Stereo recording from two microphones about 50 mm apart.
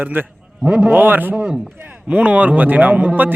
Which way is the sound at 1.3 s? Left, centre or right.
Right.